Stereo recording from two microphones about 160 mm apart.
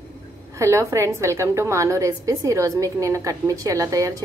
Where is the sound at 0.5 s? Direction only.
20° right (ahead or behind).